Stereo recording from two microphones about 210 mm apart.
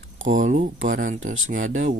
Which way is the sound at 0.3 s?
35° right (ahead or behind).